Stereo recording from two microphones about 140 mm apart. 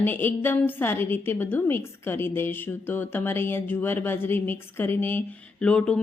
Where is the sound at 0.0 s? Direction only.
15° left (ahead or behind).